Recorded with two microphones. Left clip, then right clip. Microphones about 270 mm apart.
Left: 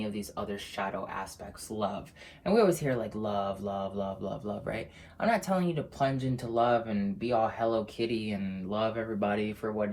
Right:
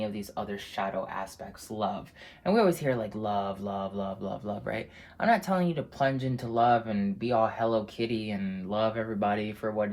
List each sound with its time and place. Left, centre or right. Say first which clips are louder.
0.0 s speech: right 2 dB; right
2.4 s speech: right 1 dB; right